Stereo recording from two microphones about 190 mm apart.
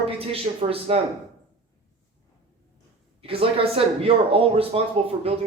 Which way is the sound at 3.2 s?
30° right (ahead or behind).